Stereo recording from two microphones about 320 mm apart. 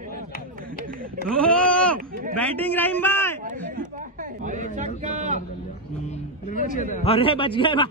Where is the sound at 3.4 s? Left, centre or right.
Right.